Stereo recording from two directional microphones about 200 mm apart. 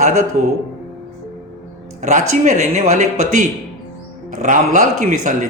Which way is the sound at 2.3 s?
35° right (ahead or behind).